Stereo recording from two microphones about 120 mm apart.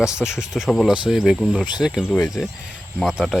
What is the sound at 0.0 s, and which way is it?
Speech, 5° right (ahead or behind).